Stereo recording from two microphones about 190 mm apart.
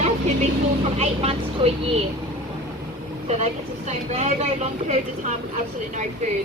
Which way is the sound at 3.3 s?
35° right (ahead or behind).